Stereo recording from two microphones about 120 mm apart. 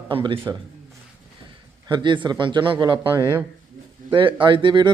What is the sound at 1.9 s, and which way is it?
Speech, 40° right (ahead or behind).